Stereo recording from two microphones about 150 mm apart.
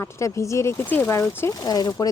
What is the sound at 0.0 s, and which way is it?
A woman's voice, 20° left (ahead or behind).